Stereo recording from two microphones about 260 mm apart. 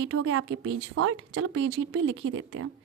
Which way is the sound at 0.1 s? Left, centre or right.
Right.